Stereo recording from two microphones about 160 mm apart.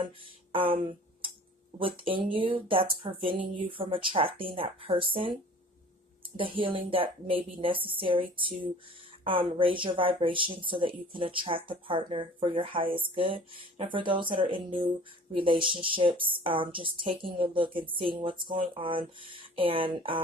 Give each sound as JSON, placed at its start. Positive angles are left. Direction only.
{"t": 0.5, "sound": "speech", "side_deg": -35}